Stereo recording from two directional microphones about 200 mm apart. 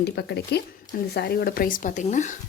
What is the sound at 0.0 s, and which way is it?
Speech, 55° left (ahead or behind).